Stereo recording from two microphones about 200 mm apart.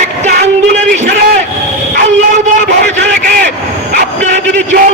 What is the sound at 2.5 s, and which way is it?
A man's voice, 40° right (ahead or behind).